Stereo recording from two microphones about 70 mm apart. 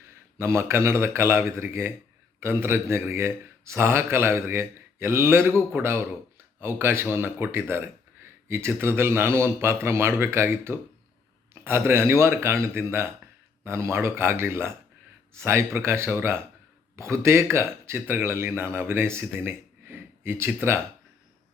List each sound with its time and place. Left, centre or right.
0.0 s a man's voice: right